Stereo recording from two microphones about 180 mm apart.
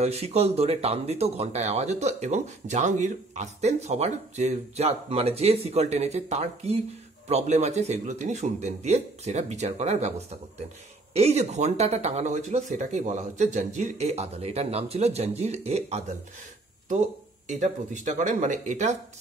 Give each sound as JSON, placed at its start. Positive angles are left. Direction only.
{"t": 0.0, "sound": "speech", "side_deg": -35}